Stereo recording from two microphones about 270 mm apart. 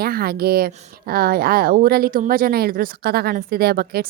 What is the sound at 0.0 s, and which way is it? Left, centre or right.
A woman's voice, right.